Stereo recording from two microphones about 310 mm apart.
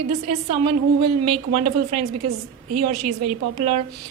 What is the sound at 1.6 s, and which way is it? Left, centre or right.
A woman's voice, right.